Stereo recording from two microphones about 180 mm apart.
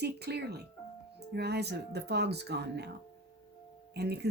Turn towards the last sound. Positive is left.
turn(degrees=-65)  # may be behind; listen again after turning